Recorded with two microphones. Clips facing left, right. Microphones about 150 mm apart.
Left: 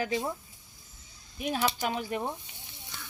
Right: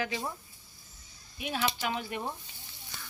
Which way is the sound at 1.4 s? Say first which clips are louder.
Left 3 dB; 40° left (ahead or behind).